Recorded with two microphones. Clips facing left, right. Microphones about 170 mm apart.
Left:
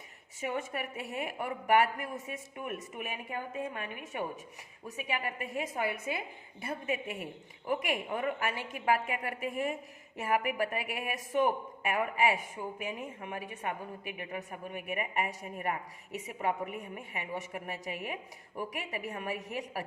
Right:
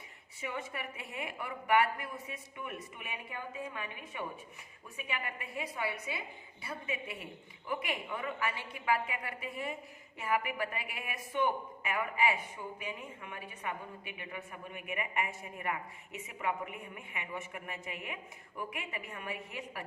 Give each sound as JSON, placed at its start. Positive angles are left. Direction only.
{"t": 0.4, "sound": "a woman's voice", "side_deg": 45}